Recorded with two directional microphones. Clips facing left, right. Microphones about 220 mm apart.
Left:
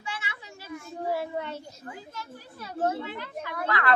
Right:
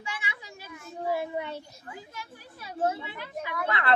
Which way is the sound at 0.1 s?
15° right (ahead or behind).